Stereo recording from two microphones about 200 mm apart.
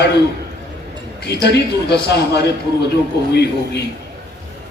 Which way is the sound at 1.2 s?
55° left (ahead or behind).